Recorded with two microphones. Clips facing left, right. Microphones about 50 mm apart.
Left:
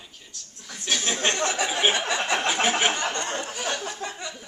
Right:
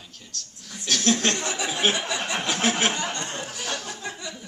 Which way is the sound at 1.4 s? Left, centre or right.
Left.